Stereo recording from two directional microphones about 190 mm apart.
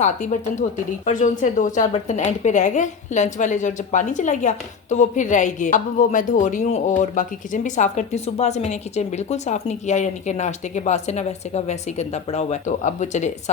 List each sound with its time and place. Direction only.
0.0 s a woman's voice: 40° left (ahead or behind)